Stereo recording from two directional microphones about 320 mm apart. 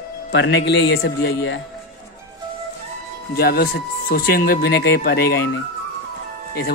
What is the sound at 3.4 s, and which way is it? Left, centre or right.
Speech, left.